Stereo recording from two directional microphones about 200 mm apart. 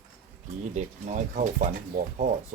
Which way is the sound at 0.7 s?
35° right (ahead or behind).